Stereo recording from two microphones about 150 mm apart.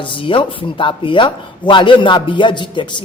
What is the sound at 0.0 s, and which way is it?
A man's voice, 35° left (ahead or behind).